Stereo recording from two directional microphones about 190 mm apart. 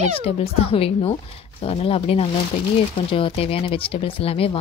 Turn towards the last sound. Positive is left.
turn(degrees=30)  # may be behind; listen again after turning